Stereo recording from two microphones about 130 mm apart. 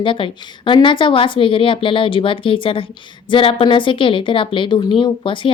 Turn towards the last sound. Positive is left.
turn(degrees=40)  # may be behind; listen again after turning